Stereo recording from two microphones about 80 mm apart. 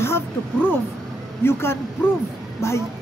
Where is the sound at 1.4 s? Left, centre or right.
Left.